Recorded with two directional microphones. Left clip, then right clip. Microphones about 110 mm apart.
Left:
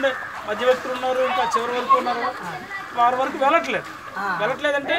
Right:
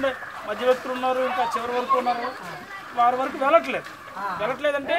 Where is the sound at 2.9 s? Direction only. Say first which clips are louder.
Left 2 dB; 15° right (ahead or behind).